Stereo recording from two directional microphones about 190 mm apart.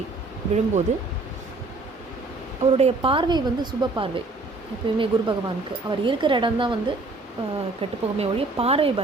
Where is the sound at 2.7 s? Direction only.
30° right (ahead or behind).